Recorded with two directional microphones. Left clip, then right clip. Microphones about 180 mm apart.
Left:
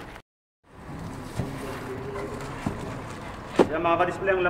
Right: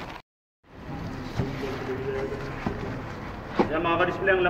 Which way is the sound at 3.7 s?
10° right (ahead or behind).